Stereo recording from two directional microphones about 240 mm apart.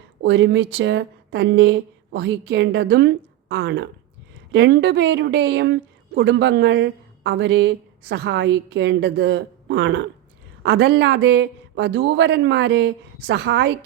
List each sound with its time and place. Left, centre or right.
0.2 s speech: right